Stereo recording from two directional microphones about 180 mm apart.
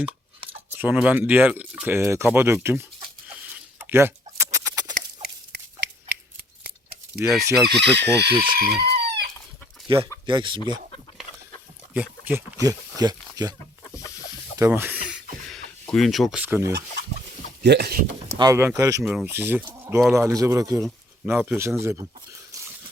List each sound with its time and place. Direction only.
0.8 s speech: 5° right (ahead or behind)
3.2 s chicken: 10° right (ahead or behind)
5.2 s biting: 65° right (ahead or behind)
7.2 s chicken: centre (ahead or behind)
7.9 s speech: 65° right (ahead or behind)
9.9 s speech: 30° right (ahead or behind)
11.9 s speech: 10° right (ahead or behind)
13.8 s chicken: 15° left (ahead or behind)
14.6 s speech: 10° right (ahead or behind)
15.4 s speech: centre (ahead or behind)
17.6 s speech: 70° right (ahead or behind)
18.3 s speech: 20° right (ahead or behind)
19.0 s speech: 5° right (ahead or behind)